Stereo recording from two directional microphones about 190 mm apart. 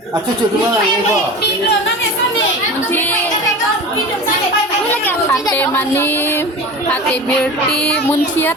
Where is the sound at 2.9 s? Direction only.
10° left (ahead or behind).